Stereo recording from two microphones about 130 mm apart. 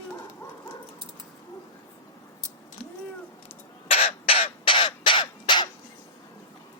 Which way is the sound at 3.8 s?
50° left (ahead or behind).